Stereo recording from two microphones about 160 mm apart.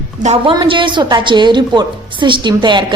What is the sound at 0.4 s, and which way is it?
A woman's voice, 30° right (ahead or behind).